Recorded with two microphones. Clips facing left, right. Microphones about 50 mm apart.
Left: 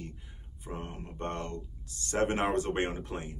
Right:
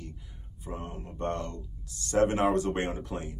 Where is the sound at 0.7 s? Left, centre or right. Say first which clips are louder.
Right 1 dB; left.